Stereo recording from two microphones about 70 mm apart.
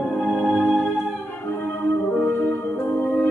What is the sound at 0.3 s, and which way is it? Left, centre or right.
Music, centre.